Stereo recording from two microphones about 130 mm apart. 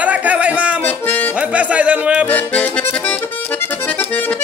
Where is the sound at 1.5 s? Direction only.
10° right (ahead or behind).